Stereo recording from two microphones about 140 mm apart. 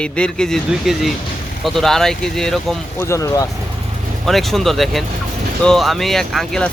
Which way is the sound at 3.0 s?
20° left (ahead or behind).